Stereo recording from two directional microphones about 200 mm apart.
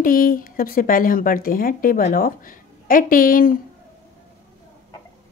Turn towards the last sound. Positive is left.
turn(degrees=45)  # may be behind; listen again after turning